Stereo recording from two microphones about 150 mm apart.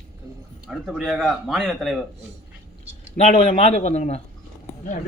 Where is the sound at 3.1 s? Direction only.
40° left (ahead or behind).